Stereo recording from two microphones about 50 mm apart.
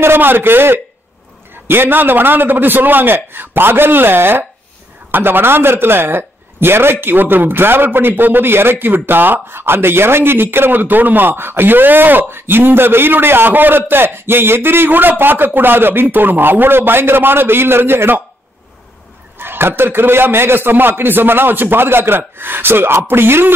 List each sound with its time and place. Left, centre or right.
0.0 s a man's voice: right
19.3 s a man's voice: right